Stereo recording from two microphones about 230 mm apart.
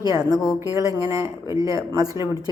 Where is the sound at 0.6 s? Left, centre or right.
Centre.